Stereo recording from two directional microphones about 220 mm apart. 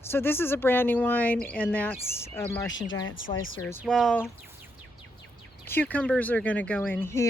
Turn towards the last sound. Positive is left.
turn(degrees=10)  # may be behind; listen again after turning